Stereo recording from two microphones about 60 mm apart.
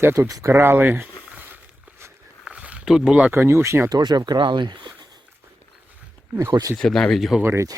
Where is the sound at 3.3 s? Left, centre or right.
Right.